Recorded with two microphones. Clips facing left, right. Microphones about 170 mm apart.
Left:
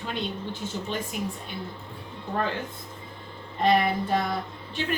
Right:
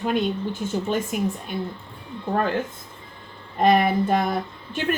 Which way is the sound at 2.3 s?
55° right (ahead or behind).